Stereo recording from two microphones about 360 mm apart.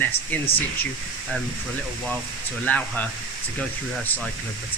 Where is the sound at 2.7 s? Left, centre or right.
Centre.